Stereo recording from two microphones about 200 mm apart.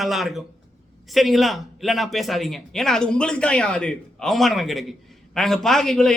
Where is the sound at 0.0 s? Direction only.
Centre (ahead or behind).